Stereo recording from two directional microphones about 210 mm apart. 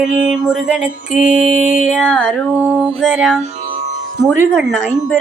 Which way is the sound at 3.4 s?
30° right (ahead or behind).